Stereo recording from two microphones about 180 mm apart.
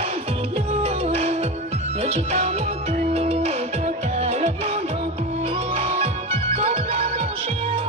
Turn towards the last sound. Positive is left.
turn(degrees=-35)  # may be behind; listen again after turning